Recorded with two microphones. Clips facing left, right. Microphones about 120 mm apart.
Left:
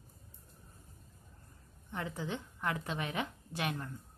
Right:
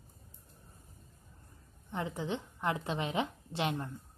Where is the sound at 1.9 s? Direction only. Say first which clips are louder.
Right 3 dB; 20° right (ahead or behind).